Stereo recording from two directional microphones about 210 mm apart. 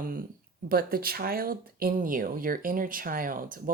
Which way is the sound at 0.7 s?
45° right (ahead or behind).